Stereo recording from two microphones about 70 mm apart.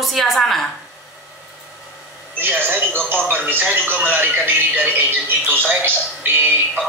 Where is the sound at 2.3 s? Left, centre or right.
Right.